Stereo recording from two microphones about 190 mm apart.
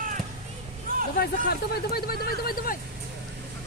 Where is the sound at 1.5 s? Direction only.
55° left (ahead or behind).